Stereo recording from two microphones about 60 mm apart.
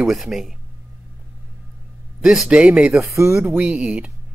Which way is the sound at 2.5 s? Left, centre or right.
Centre.